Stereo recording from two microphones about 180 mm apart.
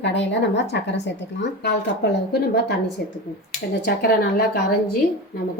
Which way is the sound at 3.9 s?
55° left (ahead or behind).